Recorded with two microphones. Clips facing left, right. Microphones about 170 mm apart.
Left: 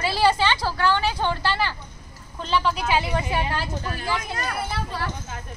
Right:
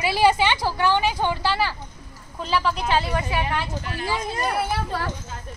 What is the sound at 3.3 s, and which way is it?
Speech, 30° left (ahead or behind).